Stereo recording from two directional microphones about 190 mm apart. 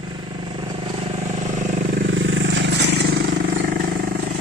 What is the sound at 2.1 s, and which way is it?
Vehicle, 90° right.